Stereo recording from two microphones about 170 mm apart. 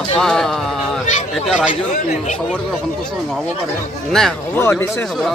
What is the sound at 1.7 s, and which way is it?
Speech, 45° left (ahead or behind).